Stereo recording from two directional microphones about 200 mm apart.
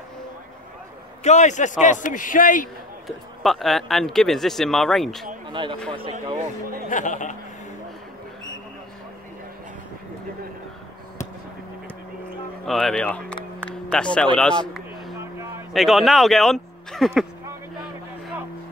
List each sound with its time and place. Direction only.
1.2 s a man's voice: 35° left (ahead or behind)
3.1 s speech: centre (ahead or behind)
5.5 s speech: 25° right (ahead or behind)
6.9 s a man's voice: 40° left (ahead or behind)
12.6 s speech: centre (ahead or behind)
13.7 s a sound: 5° left (ahead or behind)
15.1 s a sound: 15° right (ahead or behind)
15.7 s speech: centre (ahead or behind)